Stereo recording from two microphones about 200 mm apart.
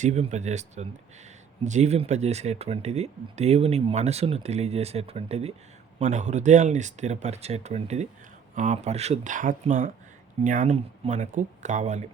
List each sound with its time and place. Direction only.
0.0 s speech: 35° right (ahead or behind)